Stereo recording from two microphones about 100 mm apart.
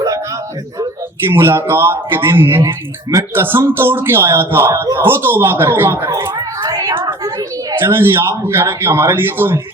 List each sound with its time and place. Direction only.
1.3 s speech: 25° right (ahead or behind)
6.6 s a sound: 35° right (ahead or behind)
7.8 s speech: 25° right (ahead or behind)